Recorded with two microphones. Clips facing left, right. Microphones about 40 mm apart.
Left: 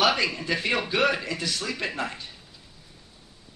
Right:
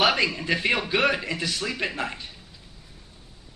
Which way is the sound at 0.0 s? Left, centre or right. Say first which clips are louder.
Right 1 dB; right.